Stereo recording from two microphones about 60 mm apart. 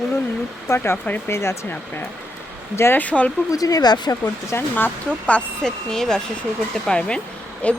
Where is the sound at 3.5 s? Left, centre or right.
Left.